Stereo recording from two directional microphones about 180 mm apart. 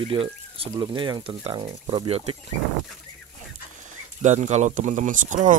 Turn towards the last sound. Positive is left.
turn(degrees=-45)  # may be behind; listen again after turning